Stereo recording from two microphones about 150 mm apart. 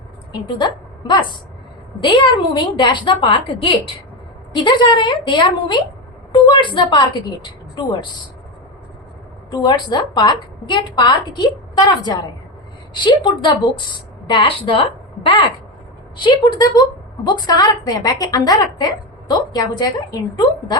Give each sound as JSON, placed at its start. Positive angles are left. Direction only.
{"t": 0.3, "sound": "a woman's voice", "side_deg": 30}
{"t": 9.5, "sound": "a woman's voice", "side_deg": 30}